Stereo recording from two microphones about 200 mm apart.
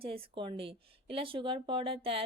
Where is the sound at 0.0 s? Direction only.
25° right (ahead or behind).